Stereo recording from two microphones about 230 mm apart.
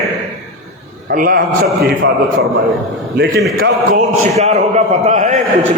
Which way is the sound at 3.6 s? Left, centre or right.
Right.